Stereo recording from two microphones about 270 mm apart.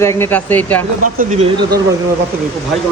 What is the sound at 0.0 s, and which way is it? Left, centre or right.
Speech, centre.